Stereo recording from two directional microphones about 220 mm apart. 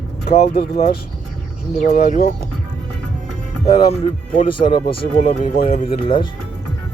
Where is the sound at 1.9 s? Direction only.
35° left (ahead or behind).